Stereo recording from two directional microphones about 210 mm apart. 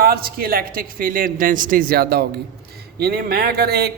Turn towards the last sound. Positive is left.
turn(degrees=-50)  # may be behind; listen again after turning